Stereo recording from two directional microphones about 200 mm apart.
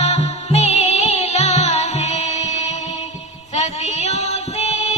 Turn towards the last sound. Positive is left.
turn(degrees=35)  # may be behind; listen again after turning